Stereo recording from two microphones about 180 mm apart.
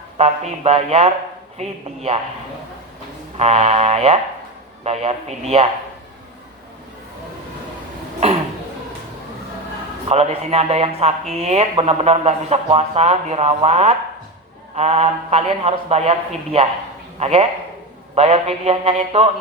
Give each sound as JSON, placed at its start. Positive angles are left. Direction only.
{"t": 0.2, "sound": "speech", "side_deg": -35}
{"t": 3.3, "sound": "speech", "side_deg": -35}
{"t": 10.1, "sound": "speech", "side_deg": -35}